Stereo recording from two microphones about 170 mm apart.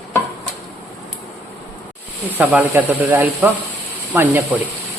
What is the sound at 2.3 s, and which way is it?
Speech, 10° right (ahead or behind).